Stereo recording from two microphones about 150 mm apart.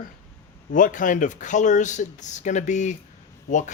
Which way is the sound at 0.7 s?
60° left (ahead or behind).